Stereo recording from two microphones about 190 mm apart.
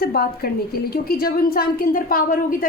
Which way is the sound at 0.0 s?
55° left (ahead or behind).